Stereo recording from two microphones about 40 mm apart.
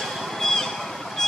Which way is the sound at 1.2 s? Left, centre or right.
Centre.